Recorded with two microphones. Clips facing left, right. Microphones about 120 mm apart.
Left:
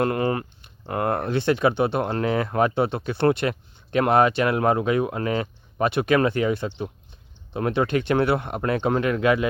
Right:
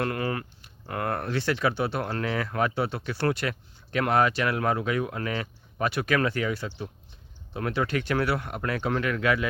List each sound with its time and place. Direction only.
0.0 s speech: 25° left (ahead or behind)